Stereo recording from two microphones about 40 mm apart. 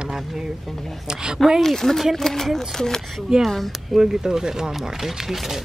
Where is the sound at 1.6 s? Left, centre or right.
Centre.